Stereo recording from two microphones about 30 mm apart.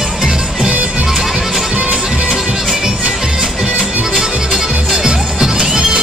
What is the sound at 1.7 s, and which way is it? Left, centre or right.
Music, right.